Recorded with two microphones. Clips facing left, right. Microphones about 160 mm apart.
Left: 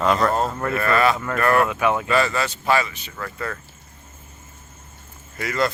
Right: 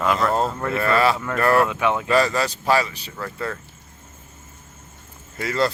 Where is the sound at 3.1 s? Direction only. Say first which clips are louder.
Right 2 dB; 20° right (ahead or behind).